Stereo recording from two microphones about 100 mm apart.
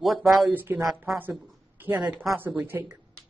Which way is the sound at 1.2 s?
15° right (ahead or behind).